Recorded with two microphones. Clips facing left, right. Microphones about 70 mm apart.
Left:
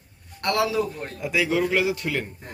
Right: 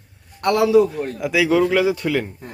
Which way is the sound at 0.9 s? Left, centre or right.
Right.